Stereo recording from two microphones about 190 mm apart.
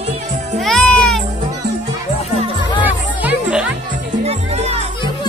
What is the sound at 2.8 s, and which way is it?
Music, 10° right (ahead or behind).